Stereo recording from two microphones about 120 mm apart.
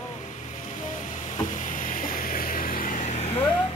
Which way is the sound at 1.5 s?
90° left.